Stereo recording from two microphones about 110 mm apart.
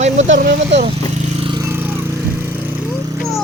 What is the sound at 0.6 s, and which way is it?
Vehicle, 70° right (ahead or behind).